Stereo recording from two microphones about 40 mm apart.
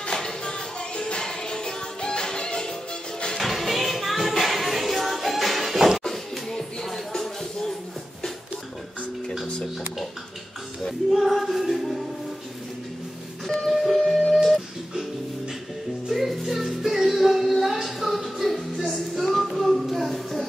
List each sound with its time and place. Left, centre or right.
0.0 s music: centre
3.3 s music: centre
11.1 s music: centre
13.9 s music: centre
14.3 s a sound: centre
16.1 s music: centre
18.9 s a sound: centre